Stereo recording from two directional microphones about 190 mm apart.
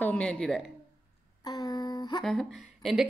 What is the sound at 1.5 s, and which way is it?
Humming, 20° left (ahead or behind).